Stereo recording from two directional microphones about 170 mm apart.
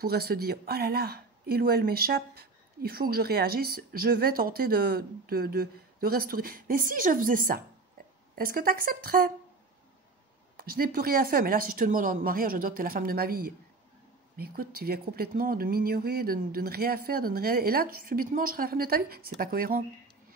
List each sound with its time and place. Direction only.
0.0 s speech: 65° right (ahead or behind)
10.6 s speech: 60° right (ahead or behind)